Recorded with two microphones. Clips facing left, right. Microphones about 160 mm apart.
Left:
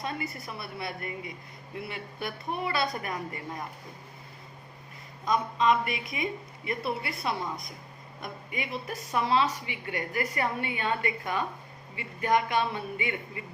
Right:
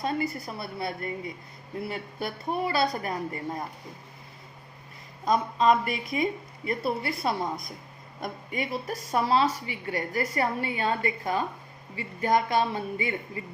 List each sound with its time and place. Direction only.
0.0 s a woman's voice: 35° right (ahead or behind)
5.2 s a woman's voice: 35° right (ahead or behind)